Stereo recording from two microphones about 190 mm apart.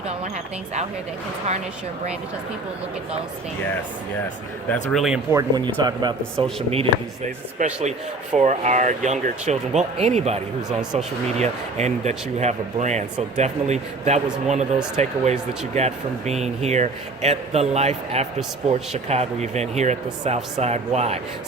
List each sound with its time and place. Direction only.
4.7 s speech: 5° left (ahead or behind)
5.3 s speech: 20° right (ahead or behind)